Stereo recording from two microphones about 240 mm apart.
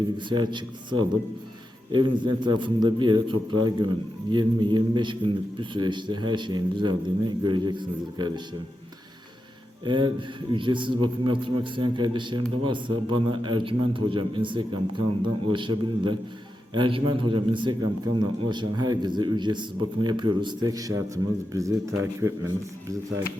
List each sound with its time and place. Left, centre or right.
0.2 s a man's voice: centre
9.8 s a man's voice: centre